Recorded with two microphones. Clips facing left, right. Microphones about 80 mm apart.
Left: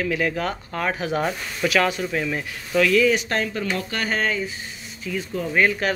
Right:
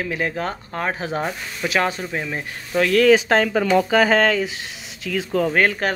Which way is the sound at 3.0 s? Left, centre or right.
Right.